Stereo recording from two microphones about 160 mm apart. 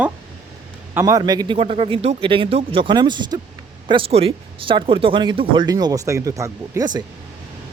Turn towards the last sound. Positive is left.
turn(degrees=-25)  # may be behind; listen again after turning